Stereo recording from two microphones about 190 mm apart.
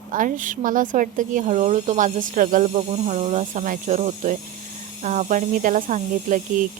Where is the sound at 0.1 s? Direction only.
45° right (ahead or behind).